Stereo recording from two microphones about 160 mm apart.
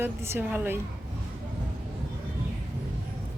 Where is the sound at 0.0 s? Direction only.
15° right (ahead or behind).